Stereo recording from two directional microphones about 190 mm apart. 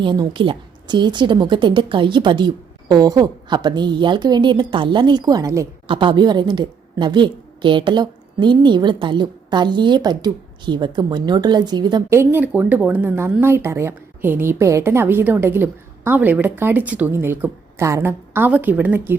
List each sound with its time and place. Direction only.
0.0 s a woman's voice: 25° right (ahead or behind); by 19.1 s 10° right (ahead or behind)